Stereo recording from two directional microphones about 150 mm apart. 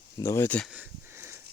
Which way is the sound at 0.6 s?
10° right (ahead or behind).